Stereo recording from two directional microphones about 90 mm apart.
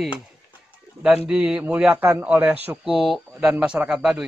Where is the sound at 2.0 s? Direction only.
25° right (ahead or behind).